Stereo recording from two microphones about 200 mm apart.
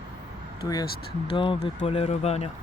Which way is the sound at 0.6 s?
20° left (ahead or behind).